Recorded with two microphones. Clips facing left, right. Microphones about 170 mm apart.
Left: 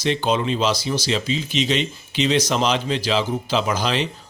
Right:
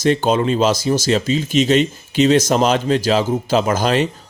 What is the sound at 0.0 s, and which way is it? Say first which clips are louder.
Speech: right 5 dB; 45° right (ahead or behind).